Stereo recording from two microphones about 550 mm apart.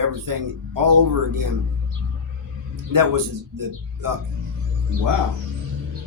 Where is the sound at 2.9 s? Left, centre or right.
Right.